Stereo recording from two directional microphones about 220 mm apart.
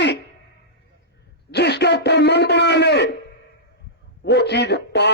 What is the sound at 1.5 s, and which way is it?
A man's voice, 50° left (ahead or behind).